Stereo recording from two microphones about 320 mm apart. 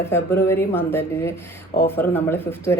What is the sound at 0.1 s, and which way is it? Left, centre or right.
Speech, centre.